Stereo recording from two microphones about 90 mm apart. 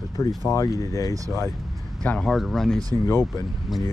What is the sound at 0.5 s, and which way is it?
Speech, 35° left (ahead or behind).